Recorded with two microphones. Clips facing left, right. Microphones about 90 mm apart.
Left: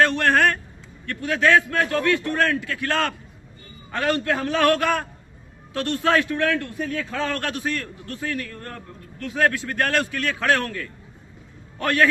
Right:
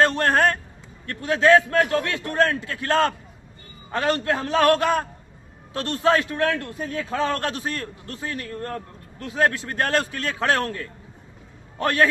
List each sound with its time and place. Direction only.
0.0 s a man's voice: 30° right (ahead or behind)